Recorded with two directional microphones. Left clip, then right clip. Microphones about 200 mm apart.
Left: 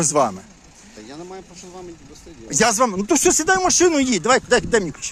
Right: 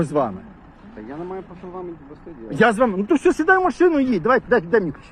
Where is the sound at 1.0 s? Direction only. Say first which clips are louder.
Right 5 dB; 35° left (ahead or behind).